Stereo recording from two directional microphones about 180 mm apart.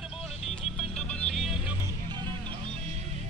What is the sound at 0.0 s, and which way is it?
Vehicle, centre (ahead or behind).